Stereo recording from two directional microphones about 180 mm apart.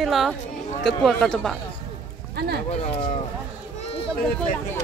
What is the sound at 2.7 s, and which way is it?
Speech, 35° left (ahead or behind).